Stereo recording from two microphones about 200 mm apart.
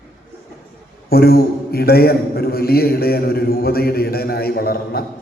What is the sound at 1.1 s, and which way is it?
A man's voice, 50° left (ahead or behind).